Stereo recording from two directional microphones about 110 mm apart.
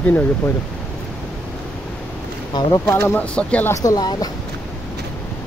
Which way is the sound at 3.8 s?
35° left (ahead or behind).